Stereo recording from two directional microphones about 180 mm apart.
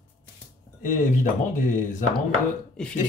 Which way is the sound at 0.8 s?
45° left (ahead or behind).